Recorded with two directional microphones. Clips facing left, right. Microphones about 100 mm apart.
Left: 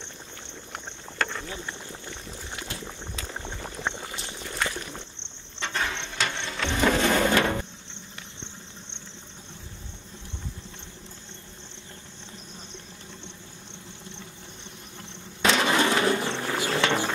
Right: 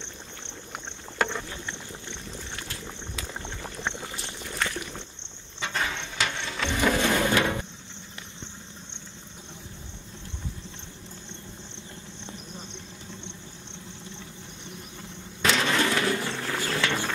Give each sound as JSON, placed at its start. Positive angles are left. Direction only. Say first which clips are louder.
{"t": 1.1, "sound": "rowboat", "louder": "right 2 dB", "side_deg": -15}
{"t": 1.5, "sound": "boiling", "louder": "left 1 dB", "side_deg": 15}
{"t": 3.6, "sound": "boat", "louder": "left 1 dB", "side_deg": 5}
{"t": 4.4, "sound": "a sound", "louder": "even", "side_deg": 5}
{"t": 5.6, "sound": "printer", "louder": "even", "side_deg": 0}
{"t": 7.0, "sound": "a sound", "louder": "left 2 dB", "side_deg": 15}
{"t": 15.0, "sound": "insect", "louder": "left 2 dB", "side_deg": 0}
{"t": 15.6, "sound": "bird", "louder": "left 2 dB", "side_deg": 20}